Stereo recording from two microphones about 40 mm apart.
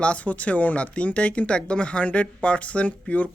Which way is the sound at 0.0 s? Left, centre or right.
Left.